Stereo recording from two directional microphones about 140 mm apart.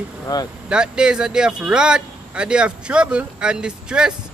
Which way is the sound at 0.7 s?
5° right (ahead or behind).